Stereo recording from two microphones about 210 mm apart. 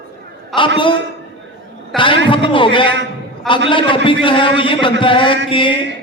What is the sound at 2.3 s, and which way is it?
A man's voice, 25° left (ahead or behind).